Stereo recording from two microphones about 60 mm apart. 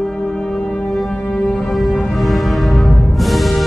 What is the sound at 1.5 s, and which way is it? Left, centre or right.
Music, centre.